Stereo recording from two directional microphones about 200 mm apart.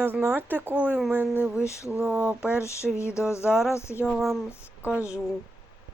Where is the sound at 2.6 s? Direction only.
15° left (ahead or behind).